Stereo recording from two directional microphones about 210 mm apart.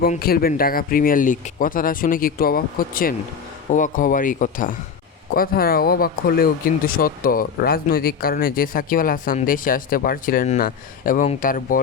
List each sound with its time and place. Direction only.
0.0 s speech: 45° left (ahead or behind)